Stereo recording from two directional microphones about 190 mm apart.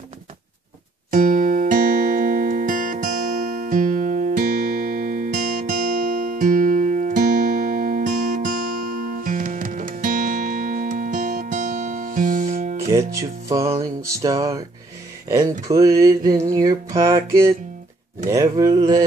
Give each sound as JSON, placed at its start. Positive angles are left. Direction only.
{"t": 1.1, "sound": "music", "side_deg": -45}
{"t": 12.9, "sound": "music", "side_deg": -15}
{"t": 15.7, "sound": "mantra", "side_deg": -20}
{"t": 16.3, "sound": "music", "side_deg": -15}
{"t": 18.3, "sound": "mantra", "side_deg": -20}